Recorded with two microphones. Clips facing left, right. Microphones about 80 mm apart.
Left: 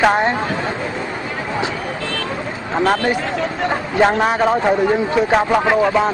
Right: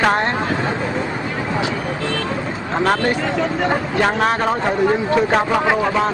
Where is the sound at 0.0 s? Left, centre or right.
Centre.